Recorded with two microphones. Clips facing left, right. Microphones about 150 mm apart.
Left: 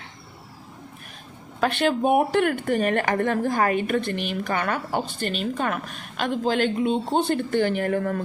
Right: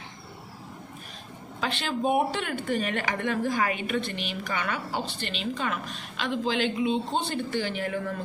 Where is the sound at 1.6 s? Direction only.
60° left (ahead or behind).